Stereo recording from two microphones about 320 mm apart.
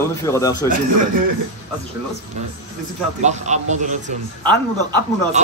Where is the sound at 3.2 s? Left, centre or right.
Right.